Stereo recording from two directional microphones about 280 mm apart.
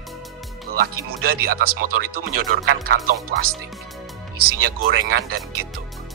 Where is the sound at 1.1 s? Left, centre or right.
Right.